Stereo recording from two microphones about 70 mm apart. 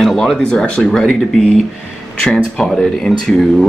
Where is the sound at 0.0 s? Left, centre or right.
Centre.